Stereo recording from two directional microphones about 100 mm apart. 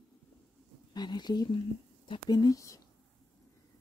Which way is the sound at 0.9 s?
45° left (ahead or behind).